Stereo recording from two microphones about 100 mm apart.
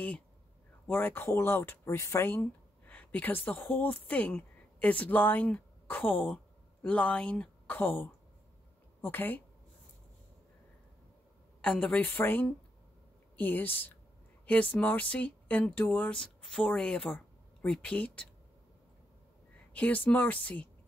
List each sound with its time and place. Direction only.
0.8 s a woman's voice: 20° left (ahead or behind)
11.6 s a woman's voice: 10° left (ahead or behind)
19.7 s a woman's voice: 15° left (ahead or behind)